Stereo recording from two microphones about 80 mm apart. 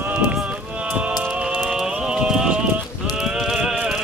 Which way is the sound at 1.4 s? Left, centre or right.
Centre.